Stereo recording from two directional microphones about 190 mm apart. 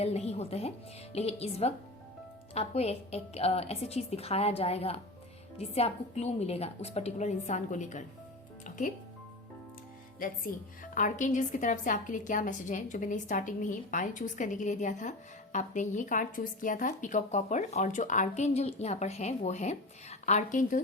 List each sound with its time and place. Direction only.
0.0 s a woman's voice: 35° left (ahead or behind)
10.2 s a woman's voice: 45° left (ahead or behind)